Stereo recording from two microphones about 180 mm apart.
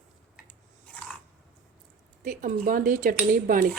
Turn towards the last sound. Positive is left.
turn(degrees=-50)  # may be behind; listen again after turning